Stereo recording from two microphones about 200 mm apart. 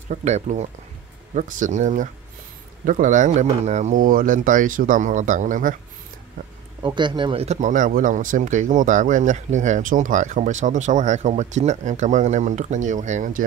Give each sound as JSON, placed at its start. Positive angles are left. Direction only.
{"t": 0.1, "sound": "speech", "side_deg": -35}
{"t": 6.8, "sound": "speech", "side_deg": -20}